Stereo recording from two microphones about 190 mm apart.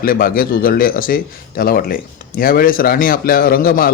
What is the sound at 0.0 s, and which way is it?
Speech, 50° left (ahead or behind).